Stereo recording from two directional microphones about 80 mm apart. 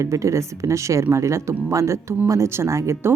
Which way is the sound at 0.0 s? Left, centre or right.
Right.